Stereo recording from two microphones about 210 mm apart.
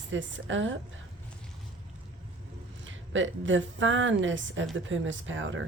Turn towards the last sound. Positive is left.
turn(degrees=-65)  # may be behind; listen again after turning